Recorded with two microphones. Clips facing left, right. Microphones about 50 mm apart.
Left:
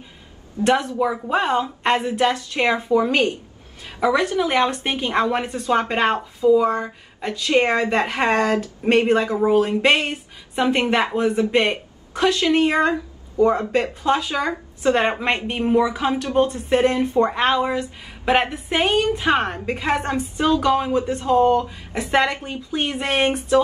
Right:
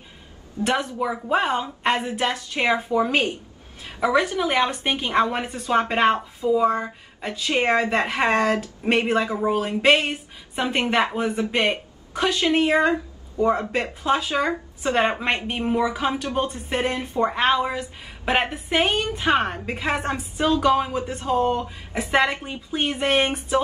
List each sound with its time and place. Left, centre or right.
0.7 s speech: centre
6.1 s speech: centre
6.6 s speech: centre